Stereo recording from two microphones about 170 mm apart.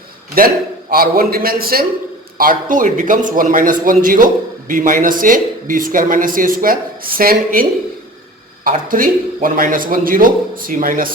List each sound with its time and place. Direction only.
0.3 s a man's voice: 60° right (ahead or behind)